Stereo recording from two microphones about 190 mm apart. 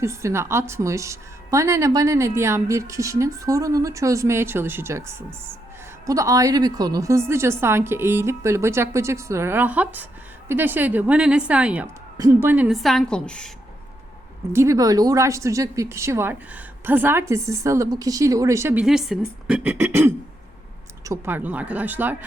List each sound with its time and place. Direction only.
0.0 s a woman's voice: 15° right (ahead or behind); by 13.5 s 5° left (ahead or behind)
14.5 s a woman's voice: 15° right (ahead or behind)